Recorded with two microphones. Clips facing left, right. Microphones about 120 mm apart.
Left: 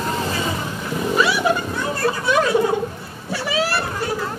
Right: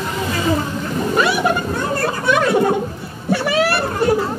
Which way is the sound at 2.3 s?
60° right (ahead or behind).